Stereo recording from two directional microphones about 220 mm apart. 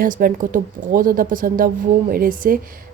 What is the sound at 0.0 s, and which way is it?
A woman's voice, 40° right (ahead or behind).